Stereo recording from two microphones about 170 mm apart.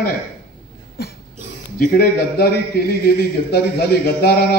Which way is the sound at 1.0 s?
70° left (ahead or behind).